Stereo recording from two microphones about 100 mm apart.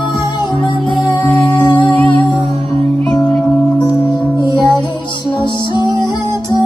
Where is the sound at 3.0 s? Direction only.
Centre (ahead or behind).